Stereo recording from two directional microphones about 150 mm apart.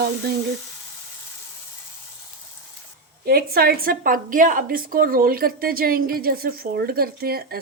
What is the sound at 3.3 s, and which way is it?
A woman's voice, 90° right.